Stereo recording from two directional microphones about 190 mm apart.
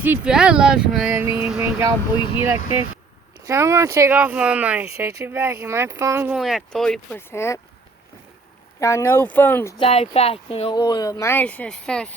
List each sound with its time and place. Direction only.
0.0 s speech: 5° right (ahead or behind)
3.4 s speech: 15° right (ahead or behind); by 7.6 s 15° left (ahead or behind)
8.8 s speech: 15° left (ahead or behind)
9.7 s speech: 30° left (ahead or behind)
10.8 s speech: 20° left (ahead or behind)